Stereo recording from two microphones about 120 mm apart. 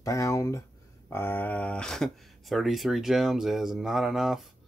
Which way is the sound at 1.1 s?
15° left (ahead or behind).